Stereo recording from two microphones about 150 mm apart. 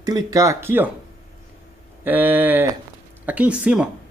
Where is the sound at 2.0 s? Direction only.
10° right (ahead or behind).